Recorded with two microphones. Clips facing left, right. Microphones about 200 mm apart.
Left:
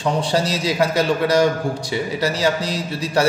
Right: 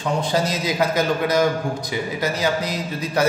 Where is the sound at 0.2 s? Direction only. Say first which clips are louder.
Left 1 dB; 30° left (ahead or behind).